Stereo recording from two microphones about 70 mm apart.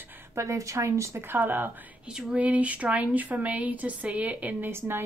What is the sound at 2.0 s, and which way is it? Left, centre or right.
A woman's voice, centre.